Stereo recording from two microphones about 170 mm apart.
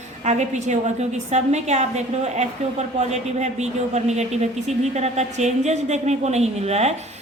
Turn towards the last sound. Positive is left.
turn(degrees=-40)  # may be behind; listen again after turning